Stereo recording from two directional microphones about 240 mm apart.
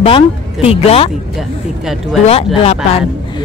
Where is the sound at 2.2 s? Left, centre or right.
Left.